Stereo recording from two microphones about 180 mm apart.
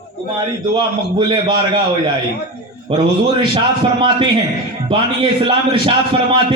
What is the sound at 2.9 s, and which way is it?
A man's voice, 25° right (ahead or behind).